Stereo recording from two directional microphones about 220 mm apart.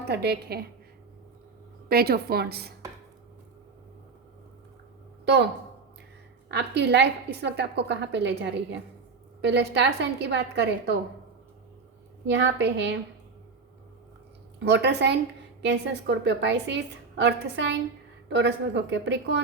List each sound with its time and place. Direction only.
0.1 s a woman's voice: 45° right (ahead or behind)
1.9 s a woman's voice: 45° right (ahead or behind)
5.2 s speech: 50° right (ahead or behind)
6.5 s a woman's voice: 50° right (ahead or behind)
12.2 s a woman's voice: 55° right (ahead or behind)
14.6 s a woman's voice: 50° right (ahead or behind)